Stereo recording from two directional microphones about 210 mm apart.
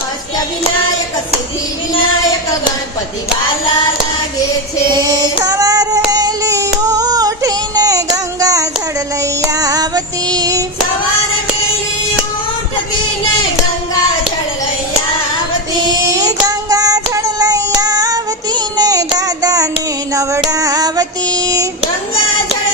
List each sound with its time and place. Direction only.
5.4 s child singing: 15° right (ahead or behind)
6.1 s music: 15° right (ahead or behind)
15.8 s child singing: 15° right (ahead or behind)
20.5 s female singing: 15° right (ahead or behind)